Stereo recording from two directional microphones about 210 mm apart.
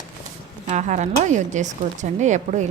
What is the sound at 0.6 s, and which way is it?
Speech, 35° right (ahead or behind).